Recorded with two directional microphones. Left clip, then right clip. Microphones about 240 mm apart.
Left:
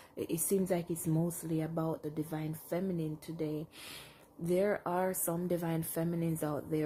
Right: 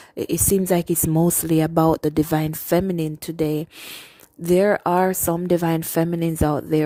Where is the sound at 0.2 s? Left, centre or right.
Right.